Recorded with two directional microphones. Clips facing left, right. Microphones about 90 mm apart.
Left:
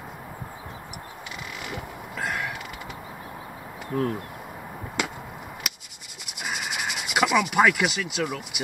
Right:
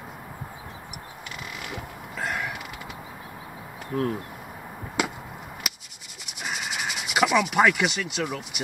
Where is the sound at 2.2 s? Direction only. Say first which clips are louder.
Even; centre (ahead or behind).